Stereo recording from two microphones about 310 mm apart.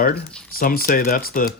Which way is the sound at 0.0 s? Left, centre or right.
Left.